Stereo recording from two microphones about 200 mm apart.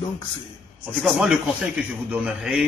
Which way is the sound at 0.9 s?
Centre (ahead or behind).